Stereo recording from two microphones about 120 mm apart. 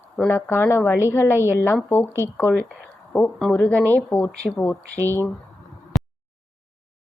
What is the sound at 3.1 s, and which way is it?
A woman's voice, centre (ahead or behind).